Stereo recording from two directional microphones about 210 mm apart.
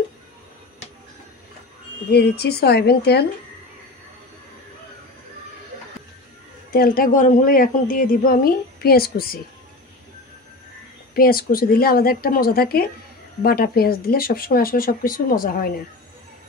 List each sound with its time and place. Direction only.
2.0 s speech: 50° left (ahead or behind)
6.7 s speech: 45° left (ahead or behind)
11.1 s speech: 45° left (ahead or behind)